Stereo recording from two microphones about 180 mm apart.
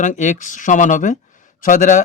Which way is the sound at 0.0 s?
45° left (ahead or behind).